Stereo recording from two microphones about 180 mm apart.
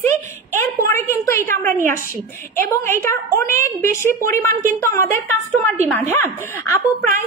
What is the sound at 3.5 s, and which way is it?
A woman's voice, 15° left (ahead or behind).